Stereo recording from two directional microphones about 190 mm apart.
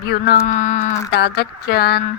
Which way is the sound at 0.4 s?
40° left (ahead or behind).